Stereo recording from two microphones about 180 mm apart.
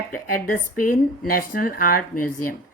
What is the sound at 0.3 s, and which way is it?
A woman's voice, 50° left (ahead or behind).